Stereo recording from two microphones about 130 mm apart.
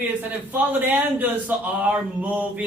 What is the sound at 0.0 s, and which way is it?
A man's voice, 15° right (ahead or behind).